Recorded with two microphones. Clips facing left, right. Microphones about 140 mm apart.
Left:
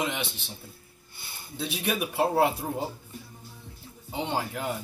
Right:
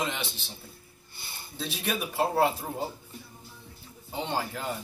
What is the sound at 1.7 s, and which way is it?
Speech, 10° left (ahead or behind).